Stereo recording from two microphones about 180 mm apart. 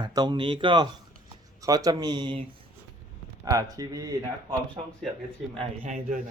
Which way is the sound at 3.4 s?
20° right (ahead or behind).